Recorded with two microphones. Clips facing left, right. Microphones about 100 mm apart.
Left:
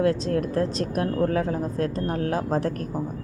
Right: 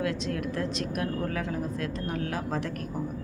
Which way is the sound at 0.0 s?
35° left (ahead or behind).